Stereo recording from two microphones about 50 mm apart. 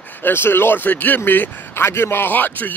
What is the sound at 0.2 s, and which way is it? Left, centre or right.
Speech, left.